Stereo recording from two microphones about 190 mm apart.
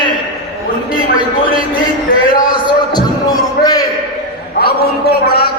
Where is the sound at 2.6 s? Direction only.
20° left (ahead or behind).